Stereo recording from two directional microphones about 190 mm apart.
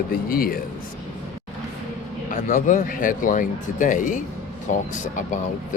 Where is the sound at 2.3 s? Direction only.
40° left (ahead or behind).